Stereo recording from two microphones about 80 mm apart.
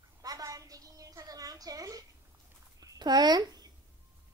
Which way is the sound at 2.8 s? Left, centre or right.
Right.